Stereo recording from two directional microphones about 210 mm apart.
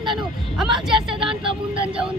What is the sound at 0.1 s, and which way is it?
Vehicle, centre (ahead or behind).